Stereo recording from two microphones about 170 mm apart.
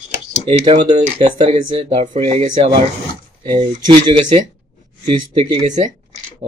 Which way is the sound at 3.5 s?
30° right (ahead or behind).